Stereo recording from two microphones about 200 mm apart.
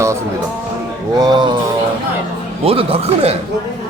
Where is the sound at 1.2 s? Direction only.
20° right (ahead or behind).